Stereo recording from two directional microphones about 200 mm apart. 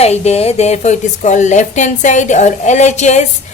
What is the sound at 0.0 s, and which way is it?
A woman's voice, 30° left (ahead or behind).